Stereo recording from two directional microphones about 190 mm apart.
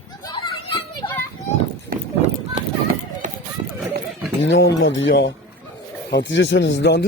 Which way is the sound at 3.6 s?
25° right (ahead or behind).